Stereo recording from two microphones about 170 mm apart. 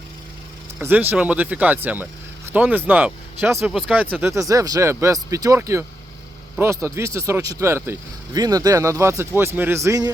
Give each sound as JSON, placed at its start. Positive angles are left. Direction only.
{"t": 0.8, "sound": "speech", "side_deg": -10}